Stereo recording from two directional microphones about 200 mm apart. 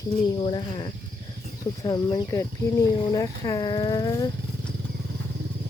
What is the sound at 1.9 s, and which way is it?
Child singing, 20° left (ahead or behind).